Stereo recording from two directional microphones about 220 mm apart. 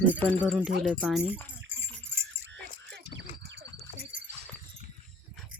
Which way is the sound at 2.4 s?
55° right (ahead or behind).